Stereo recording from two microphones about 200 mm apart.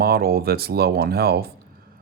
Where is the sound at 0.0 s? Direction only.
50° right (ahead or behind).